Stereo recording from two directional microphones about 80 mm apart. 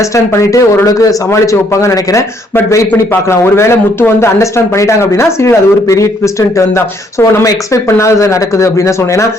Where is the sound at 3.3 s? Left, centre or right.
Left.